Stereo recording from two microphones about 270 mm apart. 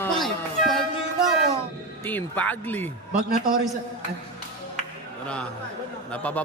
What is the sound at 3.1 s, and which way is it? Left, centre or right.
Speech, right.